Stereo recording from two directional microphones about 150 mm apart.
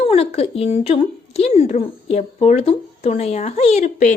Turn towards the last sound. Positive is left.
turn(degrees=55)  # may be behind; listen again after turning